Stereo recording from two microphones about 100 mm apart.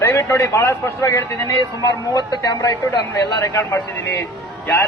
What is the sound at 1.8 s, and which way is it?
Speech, 45° left (ahead or behind).